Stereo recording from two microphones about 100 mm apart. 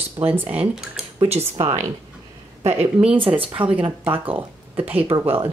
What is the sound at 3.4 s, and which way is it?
Speech, 60° right (ahead or behind).